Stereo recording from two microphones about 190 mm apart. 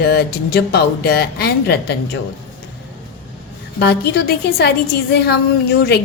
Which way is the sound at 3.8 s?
60° left (ahead or behind).